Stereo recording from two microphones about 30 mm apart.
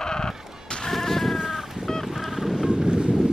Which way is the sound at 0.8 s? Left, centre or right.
Centre.